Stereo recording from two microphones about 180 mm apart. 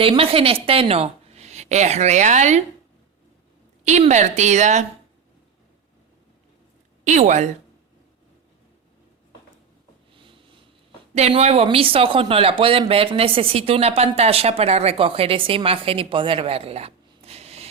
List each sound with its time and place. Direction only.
0.0 s speech: 30° right (ahead or behind)
3.8 s speech: 40° right (ahead or behind)
7.0 s speech: 40° right (ahead or behind)
11.1 s speech: 35° right (ahead or behind)